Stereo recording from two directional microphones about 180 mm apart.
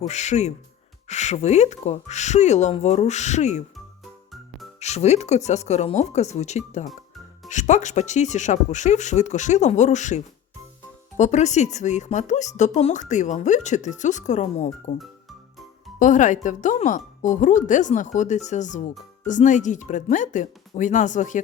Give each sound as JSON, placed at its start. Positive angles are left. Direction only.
{"t": 0.0, "sound": "speech", "side_deg": 40}
{"t": 4.8, "sound": "speech", "side_deg": 40}
{"t": 11.2, "sound": "speech", "side_deg": 40}
{"t": 16.0, "sound": "speech", "side_deg": 45}